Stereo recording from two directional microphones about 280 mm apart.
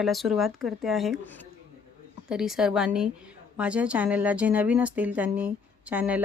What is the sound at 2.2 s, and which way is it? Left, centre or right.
Speech, centre.